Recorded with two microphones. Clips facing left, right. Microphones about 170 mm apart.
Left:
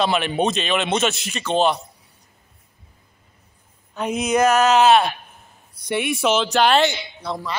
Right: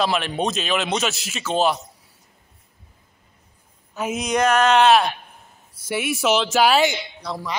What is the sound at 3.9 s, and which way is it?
A man's voice, 5° right (ahead or behind).